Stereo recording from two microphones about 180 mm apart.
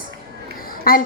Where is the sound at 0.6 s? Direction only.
55° left (ahead or behind).